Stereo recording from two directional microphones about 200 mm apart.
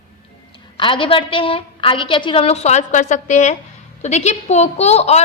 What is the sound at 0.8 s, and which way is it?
A woman's voice, 25° left (ahead or behind).